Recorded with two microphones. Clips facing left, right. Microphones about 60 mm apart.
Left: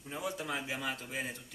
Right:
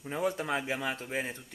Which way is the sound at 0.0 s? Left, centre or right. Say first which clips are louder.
Right 7 dB; right.